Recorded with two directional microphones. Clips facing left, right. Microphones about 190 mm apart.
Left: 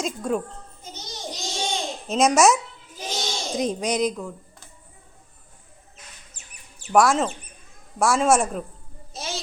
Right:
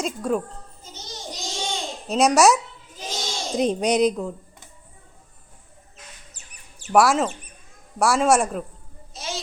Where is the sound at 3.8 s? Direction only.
70° right (ahead or behind).